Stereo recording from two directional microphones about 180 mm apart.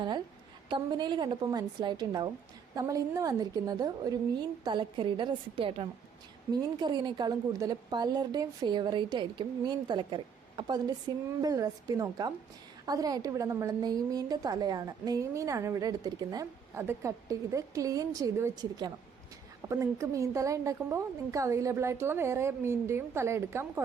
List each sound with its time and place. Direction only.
0.7 s a woman's voice: 25° right (ahead or behind)